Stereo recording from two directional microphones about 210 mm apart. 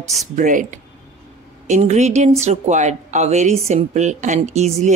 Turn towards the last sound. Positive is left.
turn(degrees=-35)  # may be behind; listen again after turning